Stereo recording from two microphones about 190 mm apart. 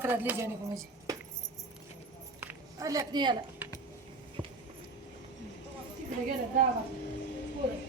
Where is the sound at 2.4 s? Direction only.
15° right (ahead or behind).